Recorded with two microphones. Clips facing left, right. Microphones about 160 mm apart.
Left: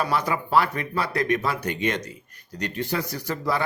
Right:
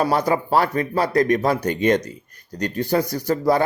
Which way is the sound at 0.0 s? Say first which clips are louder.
Right 6 dB; 40° right (ahead or behind).